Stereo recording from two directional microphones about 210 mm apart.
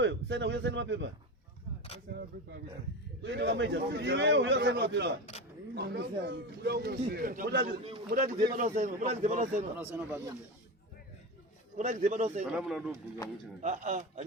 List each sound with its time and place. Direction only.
0.0 s a man's voice: 55° right (ahead or behind)
3.2 s a man's voice: 55° right (ahead or behind); by 9.6 s 35° right (ahead or behind)
9.7 s speech: 10° right (ahead or behind)
11.8 s a man's voice: 35° right (ahead or behind)
12.5 s speech: centre (ahead or behind)
13.6 s a man's voice: 35° right (ahead or behind)